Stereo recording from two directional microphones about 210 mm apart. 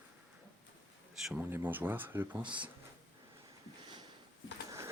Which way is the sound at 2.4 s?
20° right (ahead or behind).